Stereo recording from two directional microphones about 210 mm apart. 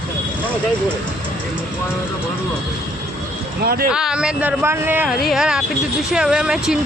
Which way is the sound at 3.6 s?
45° right (ahead or behind).